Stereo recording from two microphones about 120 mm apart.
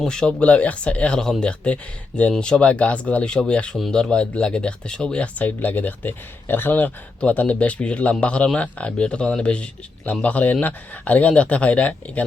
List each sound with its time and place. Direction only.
0.0 s speech: 5° left (ahead or behind)